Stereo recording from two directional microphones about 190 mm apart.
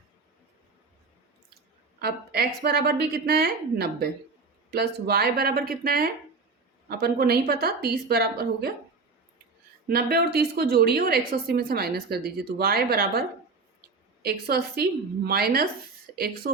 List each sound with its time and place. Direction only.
2.0 s a woman's voice: 55° right (ahead or behind)
9.9 s a woman's voice: 55° right (ahead or behind)